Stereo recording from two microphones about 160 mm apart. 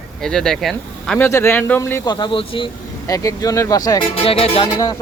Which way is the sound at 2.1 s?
30° left (ahead or behind).